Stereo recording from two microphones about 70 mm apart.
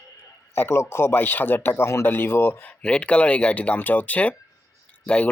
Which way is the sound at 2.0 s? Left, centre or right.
Left.